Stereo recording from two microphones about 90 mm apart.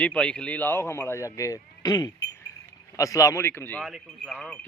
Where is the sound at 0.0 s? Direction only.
15° left (ahead or behind).